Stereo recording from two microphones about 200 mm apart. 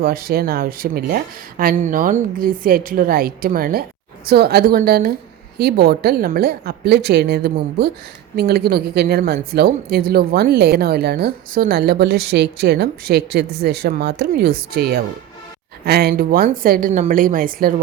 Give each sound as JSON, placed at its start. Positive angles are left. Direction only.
{"t": 0.0, "sound": "a woman's voice", "side_deg": -50}